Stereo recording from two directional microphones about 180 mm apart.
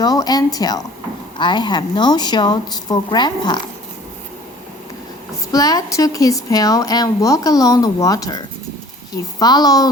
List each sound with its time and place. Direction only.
0.0 s speech: 20° left (ahead or behind)
5.5 s speech: 20° left (ahead or behind)